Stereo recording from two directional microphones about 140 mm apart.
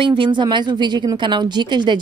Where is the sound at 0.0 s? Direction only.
35° right (ahead or behind).